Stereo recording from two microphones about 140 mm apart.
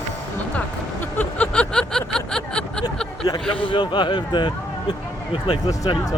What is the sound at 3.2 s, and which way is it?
Speech, 25° left (ahead or behind).